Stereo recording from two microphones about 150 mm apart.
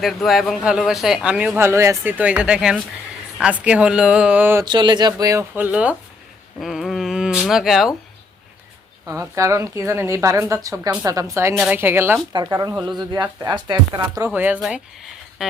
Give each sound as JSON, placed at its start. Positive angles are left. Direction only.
{"t": 0.0, "sound": "speech", "side_deg": 0}
{"t": 4.6, "sound": "speech", "side_deg": -30}
{"t": 9.0, "sound": "speech", "side_deg": -20}
{"t": 11.5, "sound": "speech", "side_deg": -10}
{"t": 13.0, "sound": "speech", "side_deg": -30}
{"t": 14.3, "sound": "speech", "side_deg": -10}